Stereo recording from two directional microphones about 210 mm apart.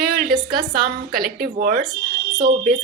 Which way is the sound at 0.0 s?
45° right (ahead or behind).